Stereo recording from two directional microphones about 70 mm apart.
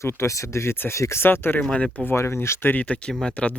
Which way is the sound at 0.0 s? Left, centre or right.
Left.